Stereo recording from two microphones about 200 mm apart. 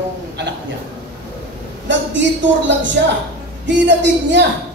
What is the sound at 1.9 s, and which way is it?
Speech, 65° right (ahead or behind).